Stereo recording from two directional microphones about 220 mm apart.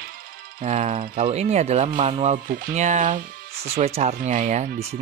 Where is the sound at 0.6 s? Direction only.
30° right (ahead or behind).